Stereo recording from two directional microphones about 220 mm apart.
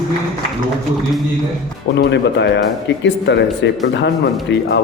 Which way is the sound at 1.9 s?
50° left (ahead or behind).